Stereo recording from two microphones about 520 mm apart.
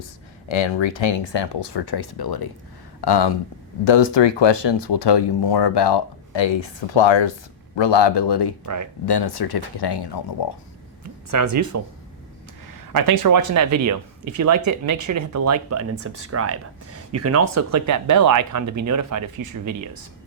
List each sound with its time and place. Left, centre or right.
0.0 s speech: left
8.6 s speech: right
9.0 s speech: left
11.3 s speech: right